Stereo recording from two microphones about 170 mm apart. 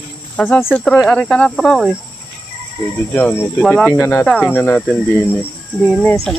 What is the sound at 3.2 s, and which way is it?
Cricket, 10° left (ahead or behind).